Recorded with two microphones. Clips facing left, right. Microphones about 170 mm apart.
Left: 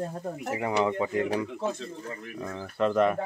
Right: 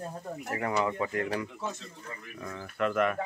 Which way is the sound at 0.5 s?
20° left (ahead or behind).